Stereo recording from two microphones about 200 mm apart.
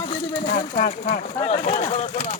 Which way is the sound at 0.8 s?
40° left (ahead or behind).